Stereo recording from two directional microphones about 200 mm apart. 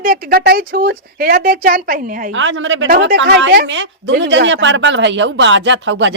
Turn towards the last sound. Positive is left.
turn(degrees=-65)  # may be behind; listen again after turning